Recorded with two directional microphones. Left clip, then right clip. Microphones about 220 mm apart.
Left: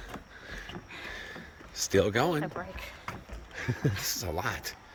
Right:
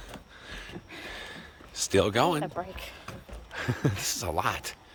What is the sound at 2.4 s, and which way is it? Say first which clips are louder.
Speech: right 2 dB; 35° right (ahead or behind).